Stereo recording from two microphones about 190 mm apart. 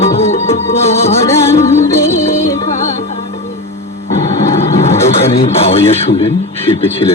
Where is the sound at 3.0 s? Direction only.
35° left (ahead or behind).